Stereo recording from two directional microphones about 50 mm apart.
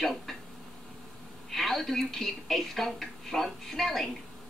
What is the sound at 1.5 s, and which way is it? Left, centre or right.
Speech, centre.